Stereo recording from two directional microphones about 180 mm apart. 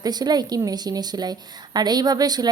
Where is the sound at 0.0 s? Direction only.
20° right (ahead or behind).